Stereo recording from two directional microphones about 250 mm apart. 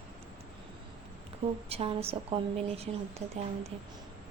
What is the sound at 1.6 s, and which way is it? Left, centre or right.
Speech, right.